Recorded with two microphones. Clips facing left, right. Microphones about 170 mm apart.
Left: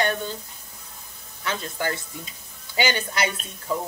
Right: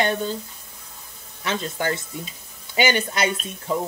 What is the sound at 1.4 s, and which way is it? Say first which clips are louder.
Speech: right 3 dB; 25° right (ahead or behind).